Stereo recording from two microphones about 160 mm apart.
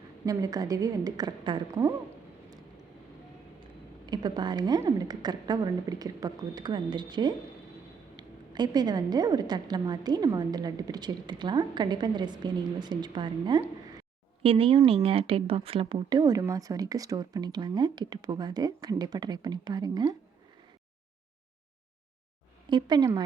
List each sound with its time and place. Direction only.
0.3 s speech: 25° right (ahead or behind)
3.6 s a woman's voice: 25° right (ahead or behind)
22.7 s speech: 25° right (ahead or behind)